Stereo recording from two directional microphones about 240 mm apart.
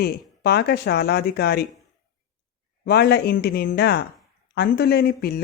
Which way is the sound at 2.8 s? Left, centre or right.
Left.